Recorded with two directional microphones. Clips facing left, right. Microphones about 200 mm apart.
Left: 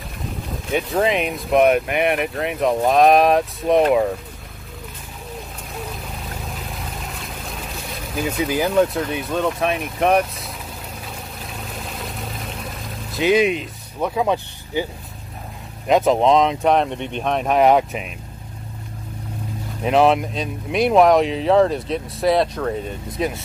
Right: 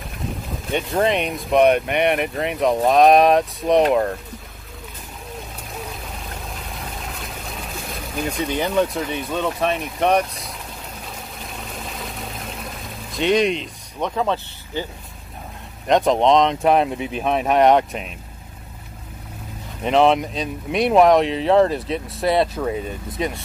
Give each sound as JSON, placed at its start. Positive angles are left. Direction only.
{"t": 0.7, "sound": "speech", "side_deg": 0}
{"t": 6.4, "sound": "vehicle", "side_deg": 0}
{"t": 11.5, "sound": "pour", "side_deg": 0}
{"t": 15.9, "sound": "speech", "side_deg": 5}
{"t": 19.8, "sound": "speech", "side_deg": 5}